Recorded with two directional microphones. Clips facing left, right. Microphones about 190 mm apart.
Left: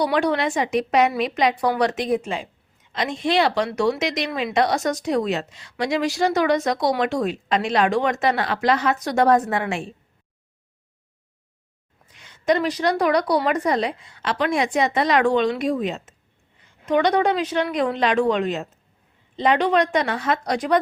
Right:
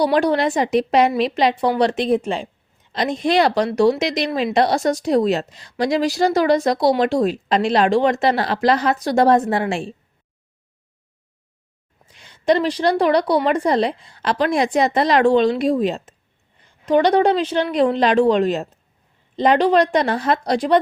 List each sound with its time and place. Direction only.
0.0 s speech: 35° right (ahead or behind)
12.1 s speech: 30° right (ahead or behind)